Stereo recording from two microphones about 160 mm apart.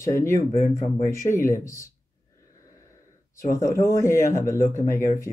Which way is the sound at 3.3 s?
20° left (ahead or behind).